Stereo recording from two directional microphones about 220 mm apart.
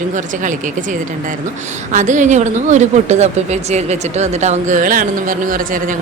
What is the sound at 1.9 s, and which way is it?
Speech, 35° right (ahead or behind).